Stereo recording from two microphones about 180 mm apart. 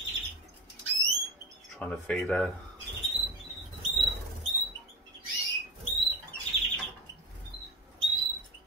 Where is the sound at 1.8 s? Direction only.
5° left (ahead or behind).